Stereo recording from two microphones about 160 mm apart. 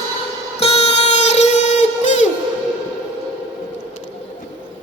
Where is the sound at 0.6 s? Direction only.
40° left (ahead or behind).